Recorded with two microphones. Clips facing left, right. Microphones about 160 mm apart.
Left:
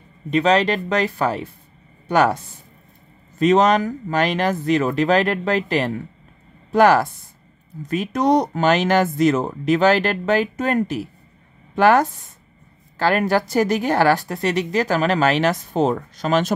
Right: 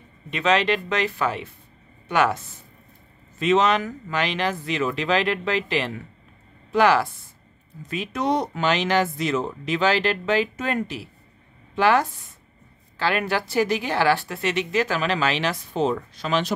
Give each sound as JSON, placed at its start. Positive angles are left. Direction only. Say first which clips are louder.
{"t": 0.3, "sound": "a woman's voice", "louder": "left 4 dB", "side_deg": 40}